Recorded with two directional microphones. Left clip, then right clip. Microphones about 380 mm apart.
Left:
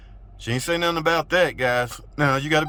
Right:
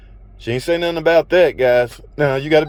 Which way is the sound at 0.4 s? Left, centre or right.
Centre.